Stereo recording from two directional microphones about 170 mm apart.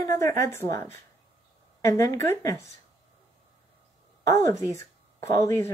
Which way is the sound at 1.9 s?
20° left (ahead or behind).